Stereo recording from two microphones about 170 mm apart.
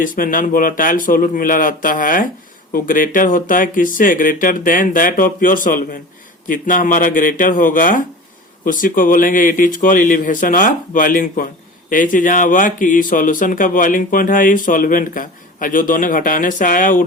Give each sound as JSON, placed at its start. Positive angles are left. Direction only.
{"t": 0.0, "sound": "speech", "side_deg": 55}